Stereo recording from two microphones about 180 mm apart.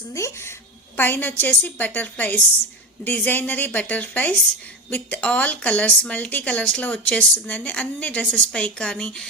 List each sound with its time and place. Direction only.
0.1 s speech: 15° left (ahead or behind)